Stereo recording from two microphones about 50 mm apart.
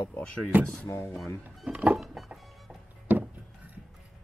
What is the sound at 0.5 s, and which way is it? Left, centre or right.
Speech, right.